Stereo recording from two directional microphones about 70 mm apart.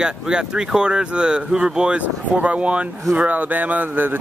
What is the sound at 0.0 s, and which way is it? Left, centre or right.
Speech, centre.